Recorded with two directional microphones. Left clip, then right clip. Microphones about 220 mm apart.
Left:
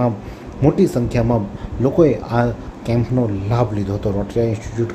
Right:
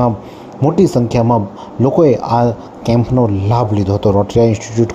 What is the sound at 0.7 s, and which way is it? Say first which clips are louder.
A man's voice: right 4 dB; 20° right (ahead or behind).